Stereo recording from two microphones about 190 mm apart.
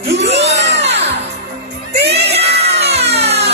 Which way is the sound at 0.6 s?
65° right (ahead or behind).